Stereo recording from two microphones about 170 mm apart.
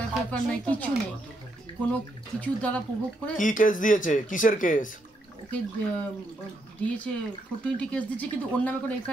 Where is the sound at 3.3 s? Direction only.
50° left (ahead or behind).